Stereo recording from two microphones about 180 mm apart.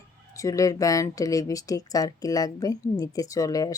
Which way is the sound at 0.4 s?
20° left (ahead or behind).